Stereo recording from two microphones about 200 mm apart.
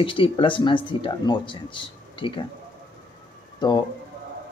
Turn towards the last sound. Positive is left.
turn(degrees=20)  # may be behind; listen again after turning